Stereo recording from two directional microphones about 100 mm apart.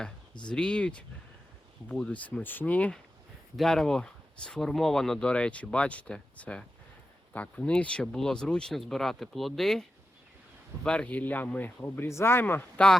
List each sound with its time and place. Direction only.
0.4 s speech: 10° left (ahead or behind)
10.8 s speech: 10° left (ahead or behind)